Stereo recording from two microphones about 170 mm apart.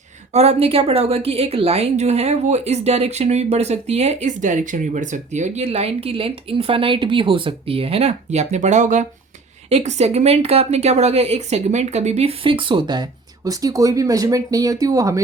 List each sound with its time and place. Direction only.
0.3 s a woman's voice: 35° right (ahead or behind); by 15.2 s 20° right (ahead or behind)